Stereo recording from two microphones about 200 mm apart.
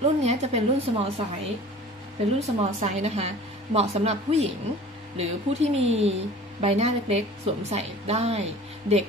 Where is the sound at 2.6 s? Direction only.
35° right (ahead or behind).